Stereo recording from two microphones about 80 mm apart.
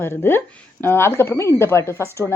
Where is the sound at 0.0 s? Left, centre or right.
Left.